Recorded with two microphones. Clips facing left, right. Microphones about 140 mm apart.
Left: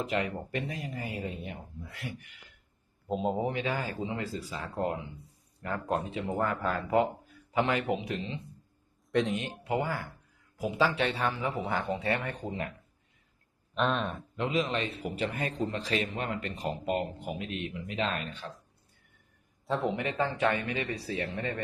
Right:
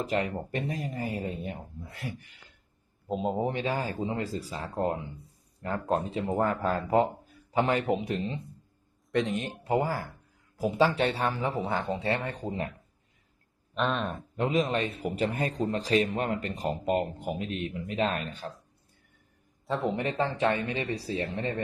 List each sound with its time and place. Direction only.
0.0 s speech: 40° right (ahead or behind)
3.1 s speech: centre (ahead or behind)
3.4 s speech: 35° right (ahead or behind)
9.1 s speech: centre (ahead or behind)
9.4 s speech: 35° right (ahead or behind)
13.7 s speech: centre (ahead or behind)
14.3 s speech: 40° right (ahead or behind)
19.6 s speech: centre (ahead or behind)
20.0 s speech: 30° right (ahead or behind)